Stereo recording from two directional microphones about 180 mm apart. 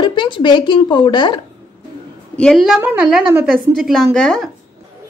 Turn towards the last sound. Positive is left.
turn(degrees=0)  # may be behind; listen again after turning